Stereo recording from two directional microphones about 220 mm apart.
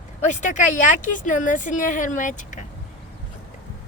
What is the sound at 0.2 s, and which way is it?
A woman's voice, 35° left (ahead or behind).